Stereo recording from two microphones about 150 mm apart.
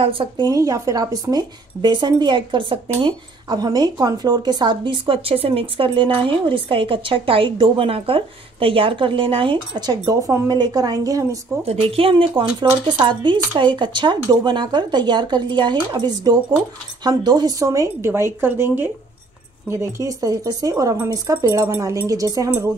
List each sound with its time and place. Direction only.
0.0 s speech: 35° right (ahead or behind)
11.6 s speech: 40° right (ahead or behind); by 22.5 s 25° right (ahead or behind)